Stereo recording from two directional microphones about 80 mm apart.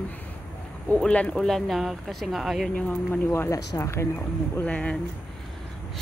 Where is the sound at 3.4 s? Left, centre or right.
Left.